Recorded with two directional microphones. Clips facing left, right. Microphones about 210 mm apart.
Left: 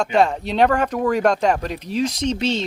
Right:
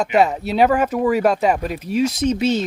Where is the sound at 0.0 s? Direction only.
5° right (ahead or behind).